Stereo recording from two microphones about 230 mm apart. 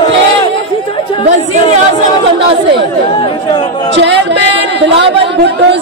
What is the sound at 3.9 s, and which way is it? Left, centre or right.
Speech, right.